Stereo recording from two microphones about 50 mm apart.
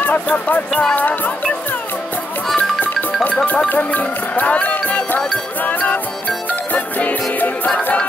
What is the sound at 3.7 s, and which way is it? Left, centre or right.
Speech, left.